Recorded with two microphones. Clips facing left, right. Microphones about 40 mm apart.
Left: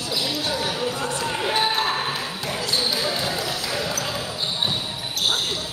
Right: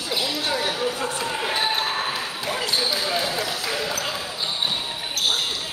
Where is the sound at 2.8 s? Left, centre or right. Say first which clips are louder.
Left 1 dB; centre.